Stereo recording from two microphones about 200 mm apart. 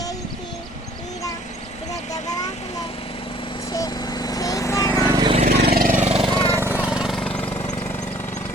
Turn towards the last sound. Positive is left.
turn(degrees=15)  # may be behind; listen again after turning